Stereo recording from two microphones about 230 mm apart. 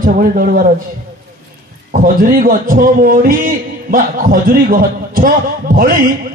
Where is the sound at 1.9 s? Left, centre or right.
Right.